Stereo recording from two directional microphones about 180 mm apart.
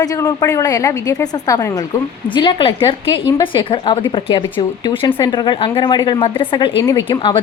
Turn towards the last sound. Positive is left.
turn(degrees=15)  # may be behind; listen again after turning